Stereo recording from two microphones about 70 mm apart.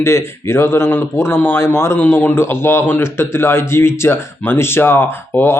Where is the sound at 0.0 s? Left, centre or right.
Left.